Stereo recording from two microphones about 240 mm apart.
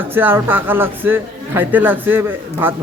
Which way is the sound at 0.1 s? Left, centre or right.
Centre.